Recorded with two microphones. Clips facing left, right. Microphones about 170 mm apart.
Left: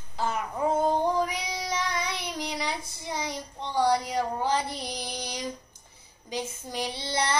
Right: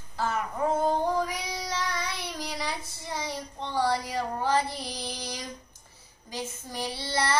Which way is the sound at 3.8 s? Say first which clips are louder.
Left 4 dB; 15° left (ahead or behind).